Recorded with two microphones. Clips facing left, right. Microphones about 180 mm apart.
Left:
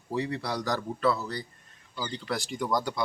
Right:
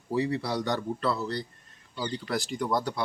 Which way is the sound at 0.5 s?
25° right (ahead or behind).